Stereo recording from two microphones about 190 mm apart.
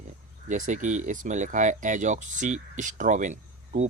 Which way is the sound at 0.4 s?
40° right (ahead or behind).